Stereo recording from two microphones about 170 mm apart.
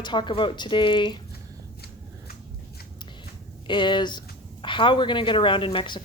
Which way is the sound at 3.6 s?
25° left (ahead or behind).